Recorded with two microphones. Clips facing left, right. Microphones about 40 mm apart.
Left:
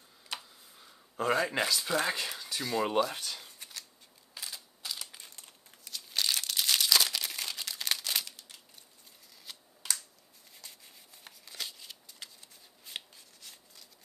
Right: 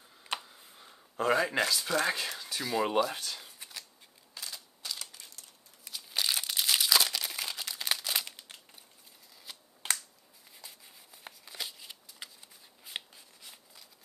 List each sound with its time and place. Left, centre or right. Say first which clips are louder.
0.4 s a sound: right 2 dB; centre
1.1 s speech: right 1 dB; centre
4.3 s single-lens reflex camera: even; centre
5.9 s crumpling: even; centre
8.3 s crumpling: right 3 dB; right
9.5 s shuffling cards: even; centre
9.8 s finger snapping: right 4 dB; right
10.5 s a sound: right 1 dB; centre
11.2 s shuffling cards: right 1 dB; centre